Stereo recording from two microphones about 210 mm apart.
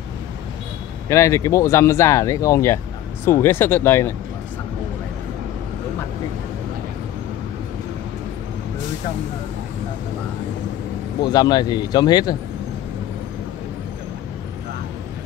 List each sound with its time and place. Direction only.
1.0 s speech: 15° left (ahead or behind)
11.2 s speech: 20° left (ahead or behind)